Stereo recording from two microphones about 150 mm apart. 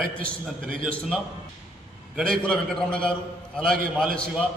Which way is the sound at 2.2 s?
5° left (ahead or behind).